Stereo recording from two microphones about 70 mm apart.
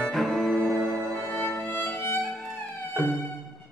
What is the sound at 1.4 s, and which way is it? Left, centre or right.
Music, left.